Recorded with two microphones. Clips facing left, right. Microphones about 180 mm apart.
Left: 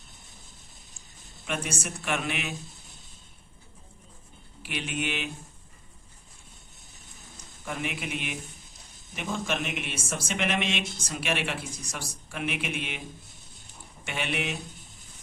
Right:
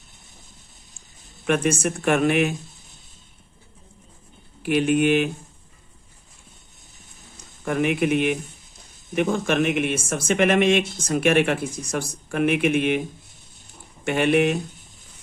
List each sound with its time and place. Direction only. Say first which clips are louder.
1.5 s speech: right 12 dB; 60° right (ahead or behind)
4.6 s speech: right 14 dB; 50° right (ahead or behind)
7.6 s speech: right 12 dB; 60° right (ahead or behind)
14.0 s speech: right 13 dB; 50° right (ahead or behind)